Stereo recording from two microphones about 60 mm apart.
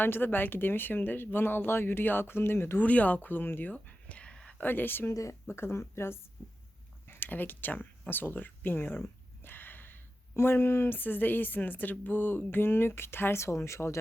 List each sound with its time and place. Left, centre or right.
0.0 s speech: left
2.8 s speech: left
5.1 s speech: left
7.1 s a sound: left
10.3 s speech: left
13.4 s speech: left